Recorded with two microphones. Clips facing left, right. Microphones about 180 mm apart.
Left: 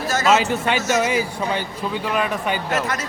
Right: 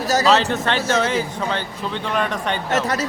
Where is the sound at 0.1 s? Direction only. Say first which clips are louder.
Right 2 dB; 35° right (ahead or behind).